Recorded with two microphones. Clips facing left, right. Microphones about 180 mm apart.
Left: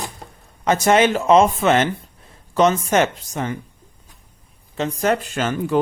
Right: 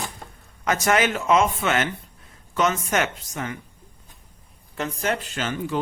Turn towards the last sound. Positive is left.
turn(degrees=50)  # may be behind; listen again after turning